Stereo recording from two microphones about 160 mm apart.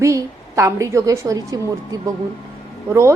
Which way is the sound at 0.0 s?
20° right (ahead or behind).